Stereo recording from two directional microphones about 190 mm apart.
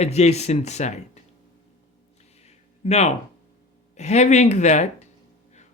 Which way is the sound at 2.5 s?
35° left (ahead or behind).